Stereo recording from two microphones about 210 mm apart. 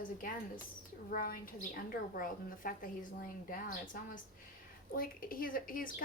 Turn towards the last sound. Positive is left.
turn(degrees=40)  # may be behind; listen again after turning